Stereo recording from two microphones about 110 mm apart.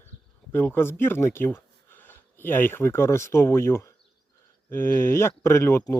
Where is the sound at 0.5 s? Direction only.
20° left (ahead or behind).